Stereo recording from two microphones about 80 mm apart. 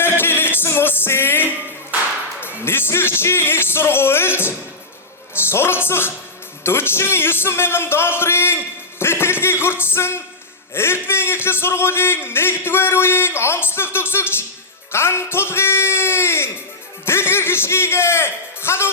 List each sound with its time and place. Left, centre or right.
0.0 s music: left
2.4 s a man's voice: left